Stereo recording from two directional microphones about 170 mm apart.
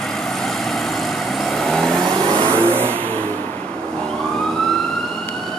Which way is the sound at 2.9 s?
10° left (ahead or behind).